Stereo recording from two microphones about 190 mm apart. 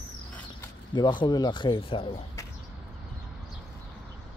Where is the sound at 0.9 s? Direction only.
25° left (ahead or behind).